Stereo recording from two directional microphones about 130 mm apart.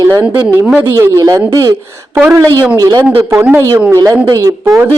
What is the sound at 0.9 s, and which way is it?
A woman's voice, 25° right (ahead or behind).